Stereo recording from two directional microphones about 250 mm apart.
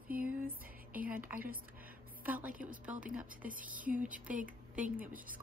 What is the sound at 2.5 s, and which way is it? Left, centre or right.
Speech, right.